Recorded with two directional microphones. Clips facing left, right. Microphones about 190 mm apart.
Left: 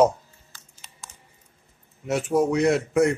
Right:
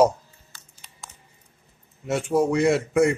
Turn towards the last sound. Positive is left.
turn(degrees=0)  # may be behind; listen again after turning